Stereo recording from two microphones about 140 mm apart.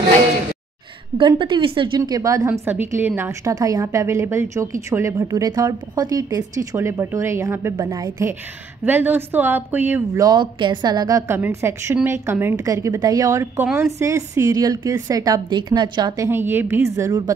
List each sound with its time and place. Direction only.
1.1 s a woman's voice: 35° right (ahead or behind); by 10.0 s 15° right (ahead or behind)
10.1 s a woman's voice: 30° right (ahead or behind)
16.3 s a woman's voice: 15° right (ahead or behind)